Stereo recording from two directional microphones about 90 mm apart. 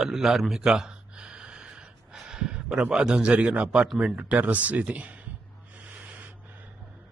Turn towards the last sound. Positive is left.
turn(degrees=-15)  # may be behind; listen again after turning